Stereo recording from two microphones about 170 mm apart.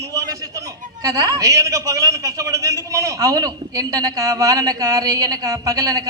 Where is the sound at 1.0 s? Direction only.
20° right (ahead or behind).